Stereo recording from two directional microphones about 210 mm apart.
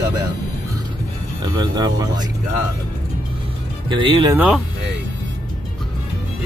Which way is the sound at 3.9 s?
25° right (ahead or behind).